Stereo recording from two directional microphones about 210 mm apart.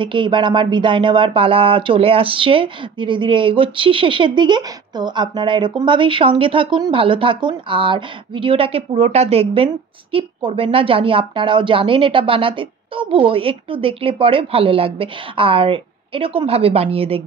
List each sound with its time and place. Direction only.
0.0 s speech: 25° right (ahead or behind)